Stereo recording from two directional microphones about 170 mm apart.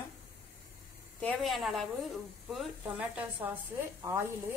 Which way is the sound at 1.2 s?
5° left (ahead or behind).